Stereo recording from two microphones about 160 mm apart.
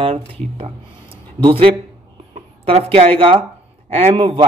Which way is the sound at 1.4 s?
35° right (ahead or behind).